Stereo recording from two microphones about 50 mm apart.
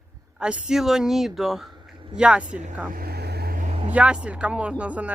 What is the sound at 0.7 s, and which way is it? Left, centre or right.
Speech, centre.